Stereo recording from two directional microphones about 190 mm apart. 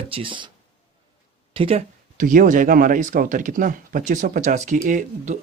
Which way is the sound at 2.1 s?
45° right (ahead or behind).